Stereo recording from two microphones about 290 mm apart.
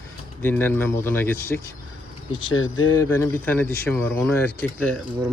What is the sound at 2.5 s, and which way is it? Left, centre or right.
Speech, left.